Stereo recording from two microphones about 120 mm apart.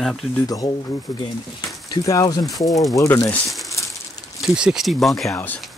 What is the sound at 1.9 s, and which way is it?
Speech, 30° left (ahead or behind).